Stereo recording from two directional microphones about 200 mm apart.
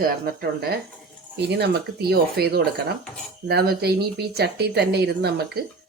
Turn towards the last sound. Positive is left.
turn(degrees=-55)  # may be behind; listen again after turning